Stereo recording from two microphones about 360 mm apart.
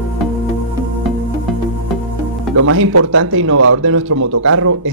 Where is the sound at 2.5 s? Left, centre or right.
Right.